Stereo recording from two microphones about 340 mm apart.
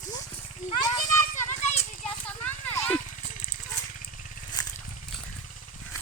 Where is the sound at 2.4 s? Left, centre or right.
Centre.